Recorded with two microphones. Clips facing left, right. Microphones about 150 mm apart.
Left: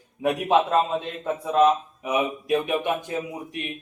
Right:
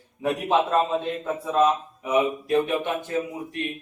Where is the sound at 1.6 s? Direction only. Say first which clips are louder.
Left 2 dB; 20° left (ahead or behind).